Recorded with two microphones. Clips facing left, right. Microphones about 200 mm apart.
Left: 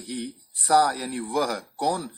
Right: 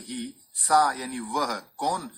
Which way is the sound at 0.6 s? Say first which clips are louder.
Left 2 dB; 35° left (ahead or behind).